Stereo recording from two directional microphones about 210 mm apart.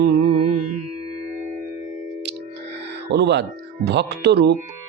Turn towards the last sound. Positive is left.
turn(degrees=-50)  # may be behind; listen again after turning